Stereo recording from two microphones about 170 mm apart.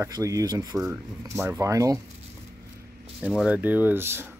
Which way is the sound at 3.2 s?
5° right (ahead or behind).